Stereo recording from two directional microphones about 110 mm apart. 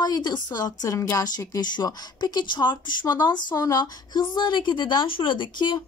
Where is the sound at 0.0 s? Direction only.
40° left (ahead or behind).